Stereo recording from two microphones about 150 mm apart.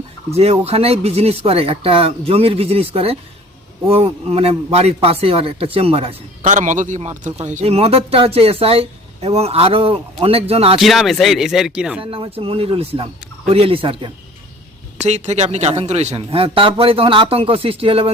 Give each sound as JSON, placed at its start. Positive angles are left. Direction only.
{"t": 0.3, "sound": "speech", "side_deg": -45}
{"t": 6.4, "sound": "speech", "side_deg": -55}
{"t": 10.8, "sound": "speech", "side_deg": 0}
{"t": 12.1, "sound": "speech", "side_deg": -35}
{"t": 15.0, "sound": "speech", "side_deg": -50}